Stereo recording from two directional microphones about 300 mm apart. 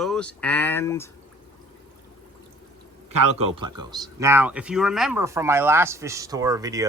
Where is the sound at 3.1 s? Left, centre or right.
Right.